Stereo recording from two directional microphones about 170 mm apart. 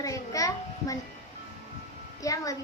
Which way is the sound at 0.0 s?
20° left (ahead or behind).